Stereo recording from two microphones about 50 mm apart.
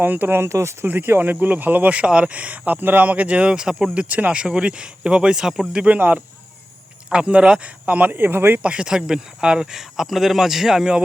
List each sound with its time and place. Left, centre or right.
0.0 s speech: right
0.4 s speech: right
0.9 s speech: right; by 3.8 s centre
3.9 s speech: right; by 5.9 s centre
5.9 s speech: right
7.1 s speech: centre
7.9 s speech: right
8.6 s speech: centre